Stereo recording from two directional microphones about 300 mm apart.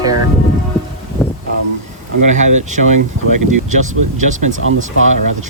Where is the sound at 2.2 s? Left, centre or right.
Right.